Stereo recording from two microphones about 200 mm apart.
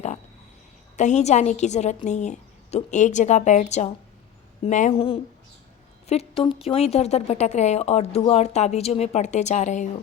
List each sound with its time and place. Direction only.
0.9 s a woman's voice: 35° left (ahead or behind)